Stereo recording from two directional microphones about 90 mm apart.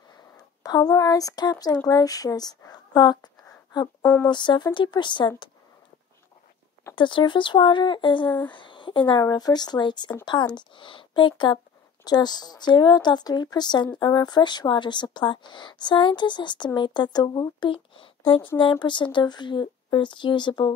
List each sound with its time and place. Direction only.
0.7 s speech: 45° left (ahead or behind)
4.0 s speech: 20° left (ahead or behind)
4.3 s speech: 60° left (ahead or behind)
7.0 s speech: 65° left (ahead or behind)
9.2 s speech: 50° left (ahead or behind); by 18.5 s 80° left
18.6 s speech: 65° left (ahead or behind)